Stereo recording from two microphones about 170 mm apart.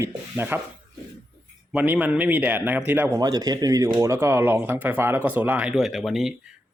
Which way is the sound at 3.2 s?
20° right (ahead or behind).